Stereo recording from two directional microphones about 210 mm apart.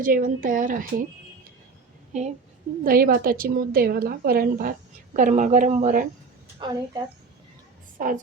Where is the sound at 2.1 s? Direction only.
35° right (ahead or behind).